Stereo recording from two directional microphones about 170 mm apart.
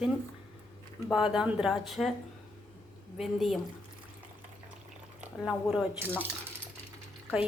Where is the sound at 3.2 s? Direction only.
Centre (ahead or behind).